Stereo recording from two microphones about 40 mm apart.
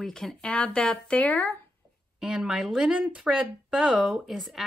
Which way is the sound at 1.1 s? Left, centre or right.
Left.